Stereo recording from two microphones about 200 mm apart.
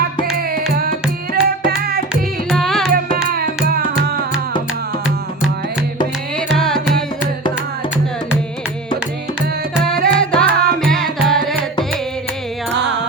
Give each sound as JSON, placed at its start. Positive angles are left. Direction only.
{"t": 0.3, "sound": "tabla", "side_deg": -50}
{"t": 1.3, "sound": "music", "side_deg": -50}
{"t": 2.5, "sound": "music", "side_deg": 0}
{"t": 5.0, "sound": "music", "side_deg": -5}
{"t": 6.3, "sound": "carnatic music", "side_deg": 5}
{"t": 10.2, "sound": "music", "side_deg": 5}